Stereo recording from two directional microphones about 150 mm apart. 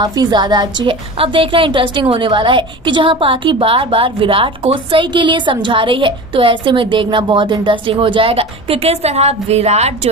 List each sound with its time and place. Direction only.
0.0 s a woman's voice: 30° right (ahead or behind); by 9.9 s 45° right (ahead or behind)